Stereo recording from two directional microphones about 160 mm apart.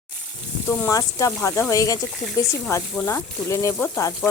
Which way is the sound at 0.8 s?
20° left (ahead or behind).